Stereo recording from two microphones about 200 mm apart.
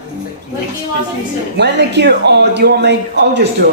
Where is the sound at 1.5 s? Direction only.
55° right (ahead or behind).